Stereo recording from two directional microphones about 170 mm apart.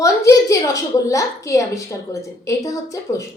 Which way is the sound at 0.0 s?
20° left (ahead or behind).